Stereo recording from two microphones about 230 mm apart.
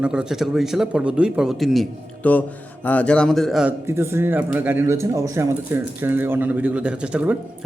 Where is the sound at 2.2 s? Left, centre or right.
Centre.